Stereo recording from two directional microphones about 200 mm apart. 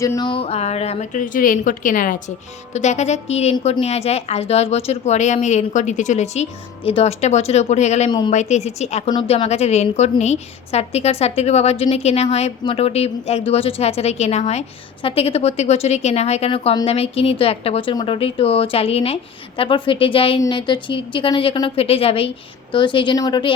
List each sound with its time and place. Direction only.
0.0 s a woman's voice: 20° left (ahead or behind)